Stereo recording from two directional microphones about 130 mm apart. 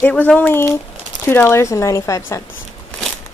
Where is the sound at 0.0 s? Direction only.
10° left (ahead or behind).